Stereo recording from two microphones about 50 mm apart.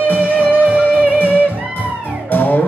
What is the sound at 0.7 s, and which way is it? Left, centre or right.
Music, right.